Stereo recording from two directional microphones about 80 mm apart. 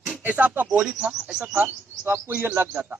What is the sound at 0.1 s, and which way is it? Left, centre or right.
Speech, centre.